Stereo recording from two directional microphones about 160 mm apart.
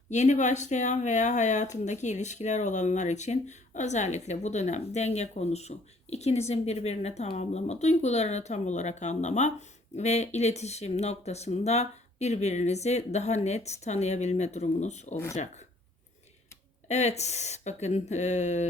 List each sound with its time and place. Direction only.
0.1 s a woman's voice: 45° left (ahead or behind)
16.9 s a woman's voice: 45° left (ahead or behind)